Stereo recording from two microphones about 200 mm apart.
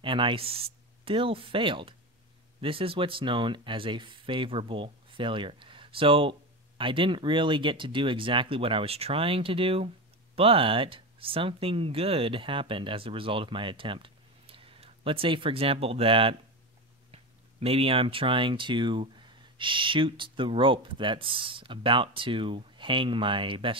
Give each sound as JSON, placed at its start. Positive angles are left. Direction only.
{"t": 0.0, "sound": "speech", "side_deg": -25}